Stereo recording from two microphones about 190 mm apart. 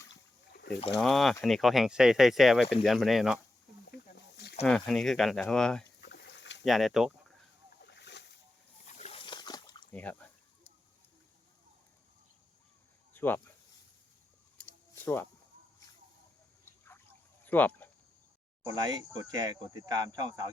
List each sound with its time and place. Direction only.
0.1 s a sound: 60° left (ahead or behind)
0.9 s speech: centre (ahead or behind)
4.6 s speech: centre (ahead or behind)
6.0 s a sound: 60° left (ahead or behind)
6.7 s speech: centre (ahead or behind)
7.8 s boat: 65° left (ahead or behind)
8.9 s dog: 35° left (ahead or behind)
9.9 s speech: 10° left (ahead or behind)
13.1 s speech: 10° left (ahead or behind)
15.0 s speech: 10° left (ahead or behind)
17.4 s a sound: 10° left (ahead or behind)
18.6 s speech: 20° right (ahead or behind)